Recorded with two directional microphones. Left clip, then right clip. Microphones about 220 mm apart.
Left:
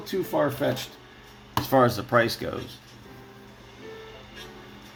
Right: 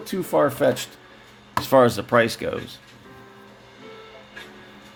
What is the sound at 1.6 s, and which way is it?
Speech, 30° right (ahead or behind).